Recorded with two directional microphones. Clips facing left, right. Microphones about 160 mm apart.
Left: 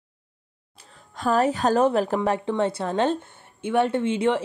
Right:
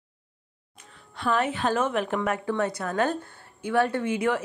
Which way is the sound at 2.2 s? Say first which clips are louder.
Left 3 dB; 25° left (ahead or behind).